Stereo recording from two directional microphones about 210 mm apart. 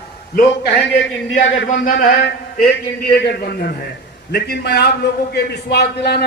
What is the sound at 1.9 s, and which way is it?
A man's voice, 40° left (ahead or behind).